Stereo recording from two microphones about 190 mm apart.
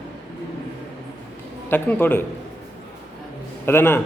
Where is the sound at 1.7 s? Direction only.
10° left (ahead or behind).